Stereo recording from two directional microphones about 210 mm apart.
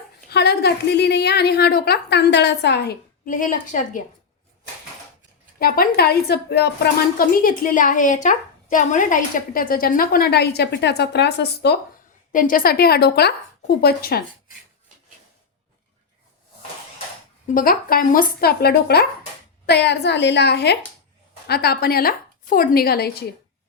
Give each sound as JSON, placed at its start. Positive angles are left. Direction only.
{"t": 0.3, "sound": "a woman's voice", "side_deg": 50}
{"t": 5.5, "sound": "a woman's voice", "side_deg": 45}
{"t": 7.2, "sound": "a woman's voice", "side_deg": 40}
{"t": 12.3, "sound": "a woman's voice", "side_deg": 40}
{"t": 17.5, "sound": "a woman's voice", "side_deg": 45}